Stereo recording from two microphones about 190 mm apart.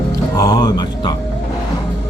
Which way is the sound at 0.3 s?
20° left (ahead or behind).